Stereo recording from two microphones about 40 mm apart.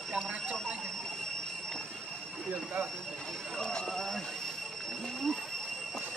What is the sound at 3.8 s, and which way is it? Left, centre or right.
Speech, centre.